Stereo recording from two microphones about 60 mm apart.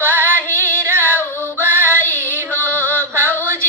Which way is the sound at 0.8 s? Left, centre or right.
Right.